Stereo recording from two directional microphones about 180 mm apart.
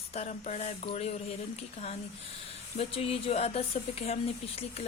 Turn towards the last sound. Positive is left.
turn(degrees=35)  # may be behind; listen again after turning